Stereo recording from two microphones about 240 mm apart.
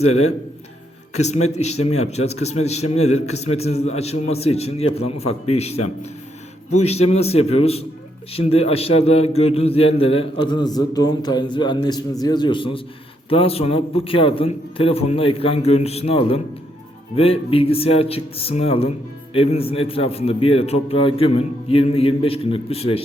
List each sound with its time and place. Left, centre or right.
1.1 s a man's voice: left